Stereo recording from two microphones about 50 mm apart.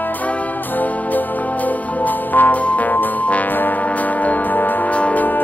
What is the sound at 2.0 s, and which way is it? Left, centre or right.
Music, left.